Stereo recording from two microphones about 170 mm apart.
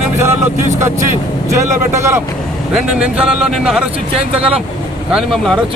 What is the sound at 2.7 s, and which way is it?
Speech, 5° right (ahead or behind).